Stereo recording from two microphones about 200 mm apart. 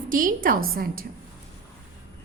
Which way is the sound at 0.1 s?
45° right (ahead or behind).